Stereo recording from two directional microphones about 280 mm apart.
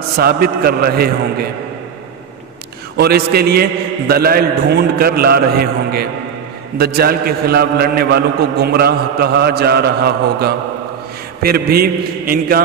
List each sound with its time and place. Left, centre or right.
0.2 s a man's voice: right
3.0 s a man's voice: right